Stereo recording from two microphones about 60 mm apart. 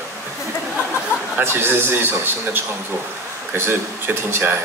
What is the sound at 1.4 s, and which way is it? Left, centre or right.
A man's voice, right.